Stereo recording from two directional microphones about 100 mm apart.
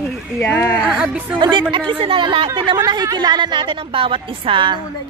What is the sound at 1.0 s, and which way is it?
Speech, 15° right (ahead or behind).